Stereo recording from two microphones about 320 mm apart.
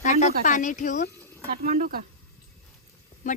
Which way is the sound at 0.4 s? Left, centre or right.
Left.